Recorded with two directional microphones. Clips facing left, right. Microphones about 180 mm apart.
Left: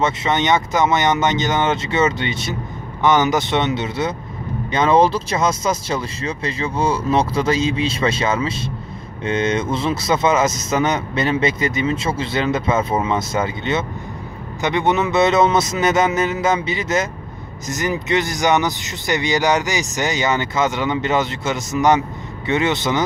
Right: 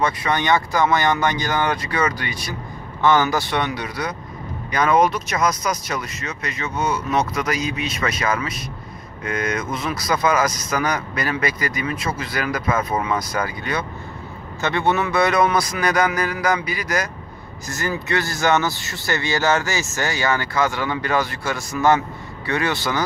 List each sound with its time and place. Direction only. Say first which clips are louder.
0.0 s speech: left 2 dB; 25° left (ahead or behind)